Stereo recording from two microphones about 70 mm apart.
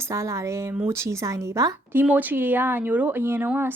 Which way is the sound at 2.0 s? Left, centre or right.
Right.